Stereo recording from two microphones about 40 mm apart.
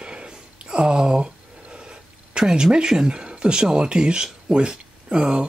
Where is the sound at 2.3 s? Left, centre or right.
Centre.